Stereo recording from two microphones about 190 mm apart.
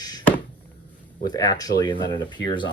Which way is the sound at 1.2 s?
20° left (ahead or behind).